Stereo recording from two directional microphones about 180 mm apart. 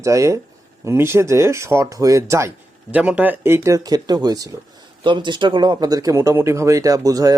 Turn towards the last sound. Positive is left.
turn(degrees=-20)  # may be behind; listen again after turning